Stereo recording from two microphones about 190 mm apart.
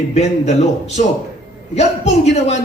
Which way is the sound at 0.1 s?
35° left (ahead or behind).